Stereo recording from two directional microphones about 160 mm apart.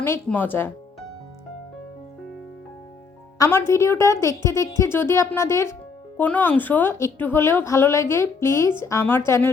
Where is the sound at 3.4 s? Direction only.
15° left (ahead or behind).